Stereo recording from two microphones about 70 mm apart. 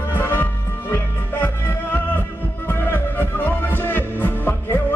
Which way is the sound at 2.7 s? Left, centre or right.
Left.